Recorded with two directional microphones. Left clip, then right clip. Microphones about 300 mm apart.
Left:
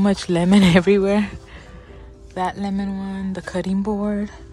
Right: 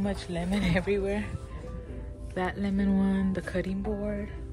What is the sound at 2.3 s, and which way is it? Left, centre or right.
A woman's voice, centre.